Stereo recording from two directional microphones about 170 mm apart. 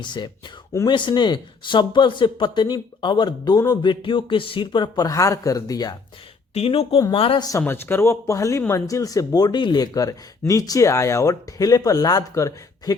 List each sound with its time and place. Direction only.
0.0 s speech: 25° left (ahead or behind)
6.5 s speech: 35° left (ahead or behind)
7.6 s speech: 10° left (ahead or behind)